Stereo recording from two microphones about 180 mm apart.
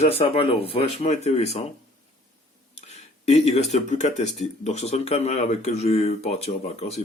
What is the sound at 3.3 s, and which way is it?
Speech, 35° left (ahead or behind).